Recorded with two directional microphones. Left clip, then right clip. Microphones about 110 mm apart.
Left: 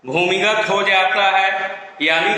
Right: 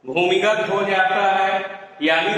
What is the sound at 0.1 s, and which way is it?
A man's voice, 35° left (ahead or behind).